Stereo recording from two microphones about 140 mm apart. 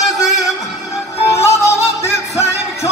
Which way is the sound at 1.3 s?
20° left (ahead or behind).